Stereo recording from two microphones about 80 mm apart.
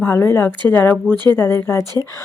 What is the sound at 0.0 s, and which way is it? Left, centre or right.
Speech, left.